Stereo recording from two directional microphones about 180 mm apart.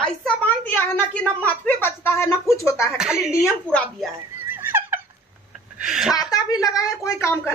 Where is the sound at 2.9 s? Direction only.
5° right (ahead or behind).